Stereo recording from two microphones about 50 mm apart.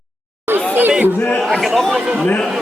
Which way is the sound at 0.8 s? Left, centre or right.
Right.